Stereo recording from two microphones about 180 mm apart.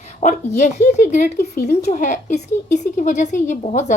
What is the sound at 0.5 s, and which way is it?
A woman's voice, 40° left (ahead or behind).